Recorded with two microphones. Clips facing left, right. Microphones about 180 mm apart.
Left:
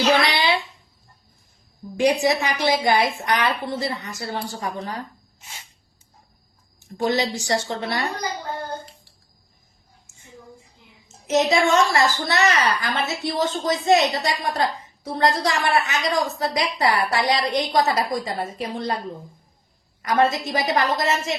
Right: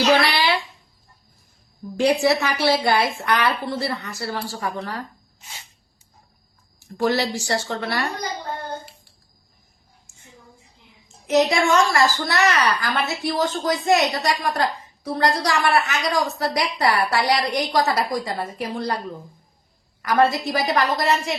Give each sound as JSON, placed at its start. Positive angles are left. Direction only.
{"t": 0.2, "sound": "a sound", "side_deg": 20}
{"t": 2.0, "sound": "a woman's voice", "side_deg": 15}
{"t": 6.7, "sound": "a woman's voice", "side_deg": 20}
{"t": 11.3, "sound": "a woman's voice", "side_deg": 20}
{"t": 20.0, "sound": "a woman's voice", "side_deg": 20}